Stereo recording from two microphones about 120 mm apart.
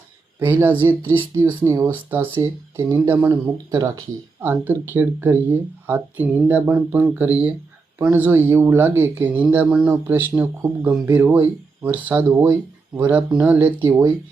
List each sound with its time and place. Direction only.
0.3 s speech: 15° right (ahead or behind)